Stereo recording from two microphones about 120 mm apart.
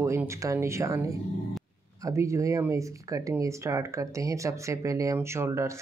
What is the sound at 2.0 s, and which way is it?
Speech, 25° right (ahead or behind).